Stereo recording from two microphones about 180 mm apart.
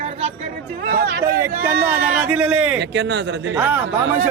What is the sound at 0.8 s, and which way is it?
Speech, 55° right (ahead or behind).